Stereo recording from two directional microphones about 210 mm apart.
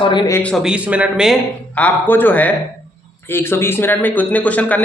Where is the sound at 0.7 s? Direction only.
5° right (ahead or behind).